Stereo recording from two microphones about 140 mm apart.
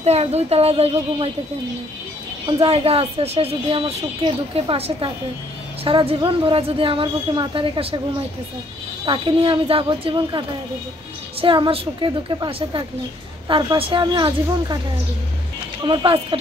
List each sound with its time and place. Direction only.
0.0 s a woman's voice: 50° right (ahead or behind)
2.4 s a woman's voice: 40° right (ahead or behind)
9.0 s a woman's voice: 40° right (ahead or behind)
11.4 s a woman's voice: 35° right (ahead or behind)
15.9 s a woman's voice: 35° right (ahead or behind)